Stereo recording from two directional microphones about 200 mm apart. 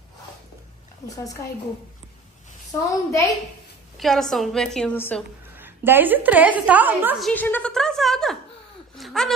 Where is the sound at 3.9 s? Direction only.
Centre (ahead or behind).